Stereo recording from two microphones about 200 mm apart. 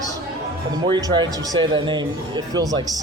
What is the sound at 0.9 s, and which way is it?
A man's voice, 20° right (ahead or behind).